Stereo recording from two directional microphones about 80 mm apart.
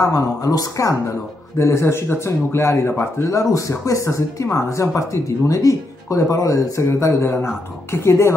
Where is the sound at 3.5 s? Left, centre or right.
Left.